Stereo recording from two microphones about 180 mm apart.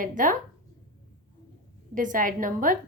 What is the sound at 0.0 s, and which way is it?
Speech, 50° right (ahead or behind).